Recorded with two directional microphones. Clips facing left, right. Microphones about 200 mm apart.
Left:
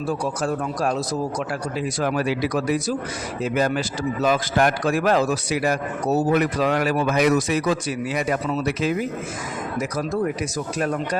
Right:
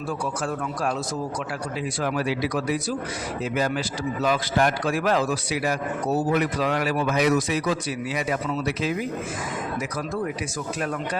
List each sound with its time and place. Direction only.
0.4 s a man's voice: 40° left (ahead or behind)
2.0 s speech: 45° left (ahead or behind)
10.8 s speech: 45° left (ahead or behind)